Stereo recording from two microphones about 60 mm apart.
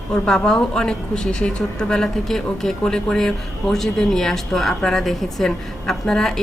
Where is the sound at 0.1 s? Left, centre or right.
Centre.